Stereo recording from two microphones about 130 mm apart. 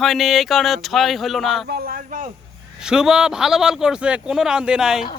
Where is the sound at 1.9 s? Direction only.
90° right.